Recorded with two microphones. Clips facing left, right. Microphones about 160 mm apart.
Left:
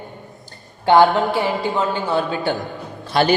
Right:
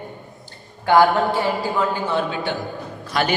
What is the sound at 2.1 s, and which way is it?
A man's voice, 35° left (ahead or behind).